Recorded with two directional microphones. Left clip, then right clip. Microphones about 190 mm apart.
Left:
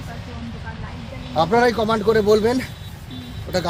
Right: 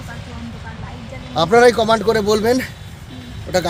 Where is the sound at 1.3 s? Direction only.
55° right (ahead or behind).